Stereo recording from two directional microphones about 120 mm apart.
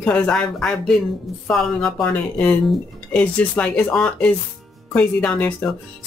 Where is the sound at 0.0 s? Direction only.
5° left (ahead or behind).